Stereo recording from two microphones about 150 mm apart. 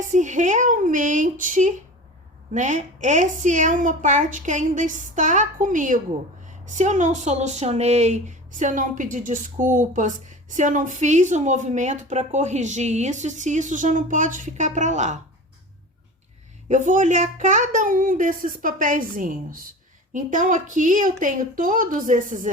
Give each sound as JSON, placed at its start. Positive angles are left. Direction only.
{"t": 0.0, "sound": "a woman's voice", "side_deg": -55}
{"t": 16.6, "sound": "a woman's voice", "side_deg": -55}